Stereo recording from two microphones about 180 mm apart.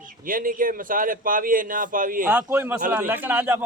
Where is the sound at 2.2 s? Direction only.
5° right (ahead or behind).